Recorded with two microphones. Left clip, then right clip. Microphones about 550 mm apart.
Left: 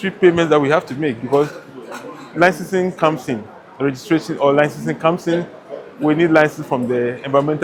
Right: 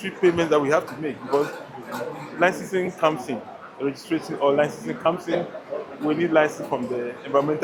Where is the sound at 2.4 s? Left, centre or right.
Left.